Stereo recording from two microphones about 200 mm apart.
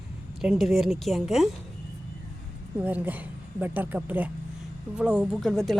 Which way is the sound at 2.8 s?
10° right (ahead or behind).